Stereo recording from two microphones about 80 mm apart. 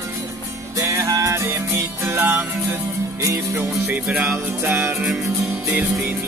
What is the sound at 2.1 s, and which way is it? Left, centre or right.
Music, right.